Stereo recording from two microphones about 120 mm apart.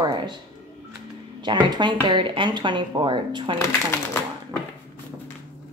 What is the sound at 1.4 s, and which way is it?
Speech, 40° right (ahead or behind).